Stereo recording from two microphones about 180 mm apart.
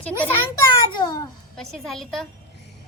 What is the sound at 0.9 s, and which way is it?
Speech, 25° left (ahead or behind).